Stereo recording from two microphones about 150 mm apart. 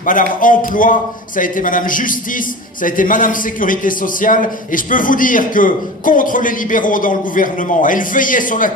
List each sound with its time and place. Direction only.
0.0 s a man's voice: 65° left (ahead or behind)